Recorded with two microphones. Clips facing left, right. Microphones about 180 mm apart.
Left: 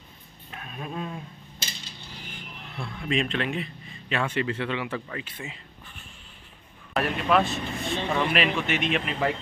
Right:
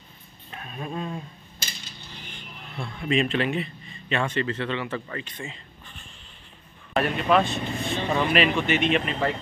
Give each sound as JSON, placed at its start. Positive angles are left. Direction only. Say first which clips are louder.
{"t": 0.5, "sound": "a sound", "louder": "right 2 dB", "side_deg": 0}
{"t": 1.6, "sound": "coin", "louder": "even", "side_deg": 25}
{"t": 2.2, "sound": "speech", "louder": "left 1 dB", "side_deg": 5}